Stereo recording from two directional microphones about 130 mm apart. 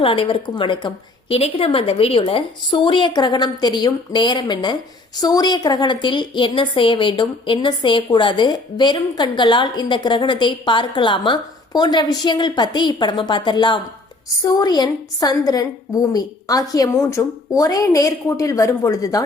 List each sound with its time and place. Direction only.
0.0 s a woman's voice: 45° left (ahead or behind); by 19.2 s 25° left (ahead or behind)